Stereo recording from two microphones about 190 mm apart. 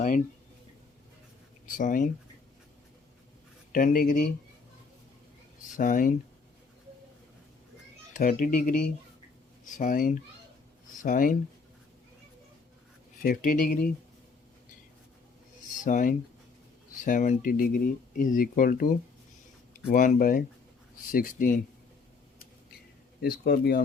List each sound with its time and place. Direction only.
1.8 s speech: 45° left (ahead or behind)
3.7 s speech: 45° left (ahead or behind)
5.7 s speech: 45° left (ahead or behind)
8.1 s speech: 45° left (ahead or behind)
13.2 s speech: 45° left (ahead or behind)
15.8 s speech: 45° left (ahead or behind)
23.2 s speech: 55° left (ahead or behind)